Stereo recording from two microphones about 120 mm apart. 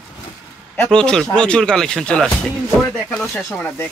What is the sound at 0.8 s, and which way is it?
Speech, 5° left (ahead or behind).